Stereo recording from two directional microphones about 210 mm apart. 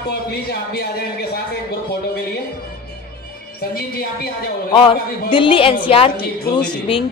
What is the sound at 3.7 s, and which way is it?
Speech, 45° left (ahead or behind).